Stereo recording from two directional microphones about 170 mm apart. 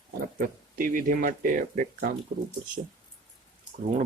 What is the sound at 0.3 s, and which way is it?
Speech, 55° right (ahead or behind).